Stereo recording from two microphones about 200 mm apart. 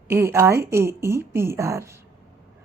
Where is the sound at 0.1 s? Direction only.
10° right (ahead or behind).